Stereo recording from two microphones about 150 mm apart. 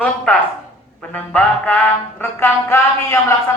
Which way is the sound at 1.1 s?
10° left (ahead or behind).